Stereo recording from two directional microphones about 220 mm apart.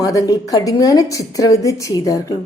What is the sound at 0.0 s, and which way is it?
A woman's voice, 15° left (ahead or behind).